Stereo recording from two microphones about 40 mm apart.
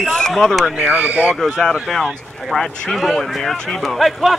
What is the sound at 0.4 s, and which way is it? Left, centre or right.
Speech, centre.